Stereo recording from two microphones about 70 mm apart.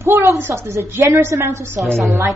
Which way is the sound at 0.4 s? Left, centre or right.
Right.